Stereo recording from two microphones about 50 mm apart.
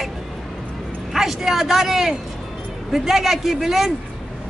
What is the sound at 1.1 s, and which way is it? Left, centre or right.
A man's voice, centre.